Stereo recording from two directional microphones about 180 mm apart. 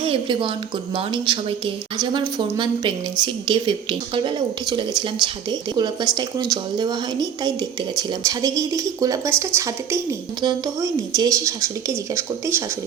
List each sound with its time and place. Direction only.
0.0 s a woman's voice: 30° right (ahead or behind); by 12.6 s 15° right (ahead or behind)